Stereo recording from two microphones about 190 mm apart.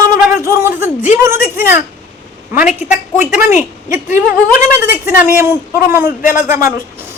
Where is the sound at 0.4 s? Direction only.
15° right (ahead or behind).